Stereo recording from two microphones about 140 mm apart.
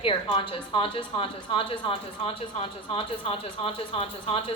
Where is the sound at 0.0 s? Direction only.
35° left (ahead or behind).